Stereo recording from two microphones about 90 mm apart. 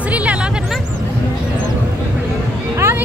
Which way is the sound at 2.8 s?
30° right (ahead or behind).